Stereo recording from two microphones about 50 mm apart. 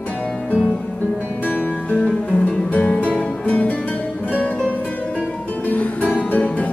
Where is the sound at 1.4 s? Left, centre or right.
Left.